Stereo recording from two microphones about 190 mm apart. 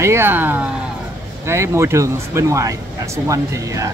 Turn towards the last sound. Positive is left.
turn(degrees=-15)  # may be behind; listen again after turning